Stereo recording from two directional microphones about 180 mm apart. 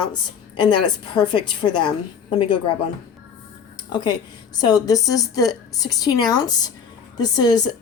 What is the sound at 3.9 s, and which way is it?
A woman's voice, 25° left (ahead or behind).